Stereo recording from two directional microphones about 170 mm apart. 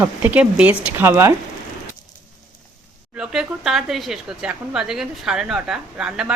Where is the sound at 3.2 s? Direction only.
5° right (ahead or behind).